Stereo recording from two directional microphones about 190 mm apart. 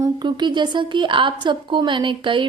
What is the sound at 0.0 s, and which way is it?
A woman's voice, 25° right (ahead or behind).